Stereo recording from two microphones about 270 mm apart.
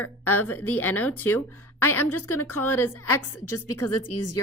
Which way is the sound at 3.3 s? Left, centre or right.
Left.